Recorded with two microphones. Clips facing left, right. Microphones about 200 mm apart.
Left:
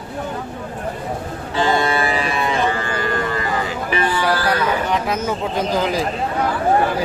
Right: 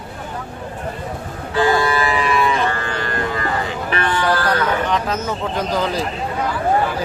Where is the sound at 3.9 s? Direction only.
10° left (ahead or behind).